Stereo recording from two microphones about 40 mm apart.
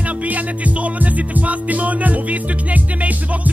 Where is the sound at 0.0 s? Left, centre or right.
Right.